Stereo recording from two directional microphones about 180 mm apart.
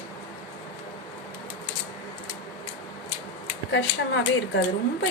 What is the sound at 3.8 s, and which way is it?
Speech, 75° left (ahead or behind).